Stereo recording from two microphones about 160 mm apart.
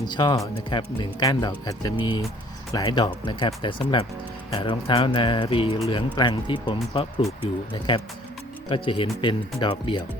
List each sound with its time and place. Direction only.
0.1 s speech: 25° left (ahead or behind)